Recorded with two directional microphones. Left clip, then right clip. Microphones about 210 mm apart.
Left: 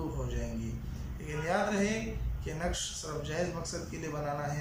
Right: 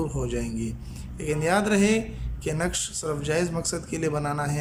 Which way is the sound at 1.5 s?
50° right (ahead or behind).